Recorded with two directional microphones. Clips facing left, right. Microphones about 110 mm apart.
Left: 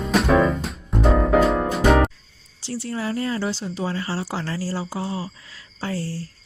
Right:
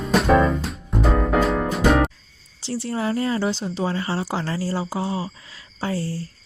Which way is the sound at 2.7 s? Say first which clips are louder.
Right 2 dB; 25° right (ahead or behind).